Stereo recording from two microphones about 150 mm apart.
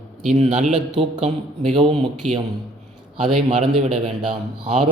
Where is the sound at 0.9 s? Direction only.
40° right (ahead or behind).